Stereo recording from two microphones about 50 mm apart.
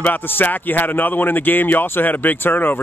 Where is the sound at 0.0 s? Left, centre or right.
Left.